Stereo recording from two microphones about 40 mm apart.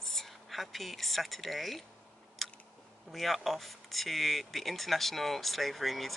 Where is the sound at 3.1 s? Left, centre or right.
Centre.